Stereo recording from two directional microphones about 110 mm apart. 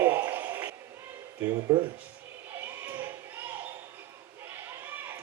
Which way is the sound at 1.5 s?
40° right (ahead or behind).